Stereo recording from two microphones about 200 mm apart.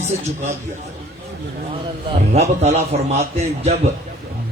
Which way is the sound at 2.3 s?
35° right (ahead or behind).